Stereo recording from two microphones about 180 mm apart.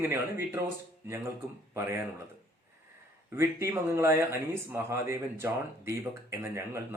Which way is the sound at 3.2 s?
15° right (ahead or behind).